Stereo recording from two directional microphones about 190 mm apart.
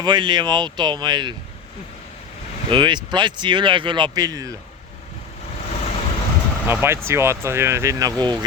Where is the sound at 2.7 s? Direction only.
25° right (ahead or behind).